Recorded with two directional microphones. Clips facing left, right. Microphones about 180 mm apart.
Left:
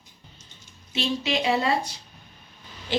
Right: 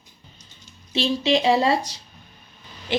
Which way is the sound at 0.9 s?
30° right (ahead or behind).